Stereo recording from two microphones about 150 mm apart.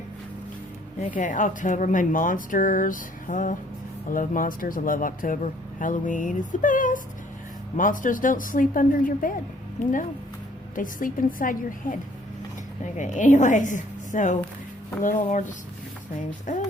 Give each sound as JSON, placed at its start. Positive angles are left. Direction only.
{"t": 0.9, "sound": "speech", "side_deg": 55}
{"t": 10.8, "sound": "speech", "side_deg": 65}
{"t": 12.8, "sound": "speech", "side_deg": 55}